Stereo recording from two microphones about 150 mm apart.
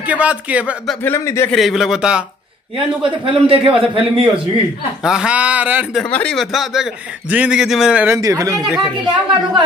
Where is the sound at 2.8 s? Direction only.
35° right (ahead or behind).